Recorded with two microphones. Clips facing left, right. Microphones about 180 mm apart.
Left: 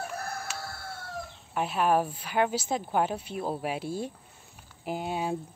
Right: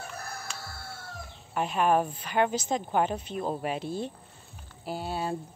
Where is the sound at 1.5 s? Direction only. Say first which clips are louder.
Right 1 dB; 5° left (ahead or behind).